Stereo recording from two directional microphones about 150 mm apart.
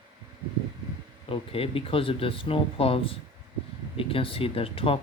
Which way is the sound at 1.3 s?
40° left (ahead or behind).